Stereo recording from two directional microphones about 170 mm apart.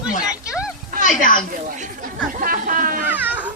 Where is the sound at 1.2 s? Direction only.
55° left (ahead or behind).